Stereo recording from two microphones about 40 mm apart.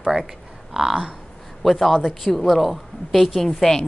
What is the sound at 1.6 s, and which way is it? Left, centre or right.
Speech, centre.